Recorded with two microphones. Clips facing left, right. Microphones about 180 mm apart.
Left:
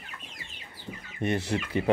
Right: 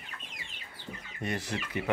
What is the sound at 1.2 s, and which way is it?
Speech, 25° left (ahead or behind).